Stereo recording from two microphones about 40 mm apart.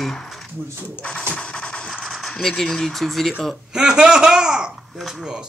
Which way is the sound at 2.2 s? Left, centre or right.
Centre.